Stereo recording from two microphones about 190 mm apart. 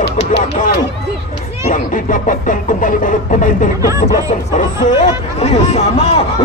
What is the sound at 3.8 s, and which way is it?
Speech, 15° right (ahead or behind).